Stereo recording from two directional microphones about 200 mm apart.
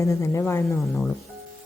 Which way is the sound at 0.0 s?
15° left (ahead or behind).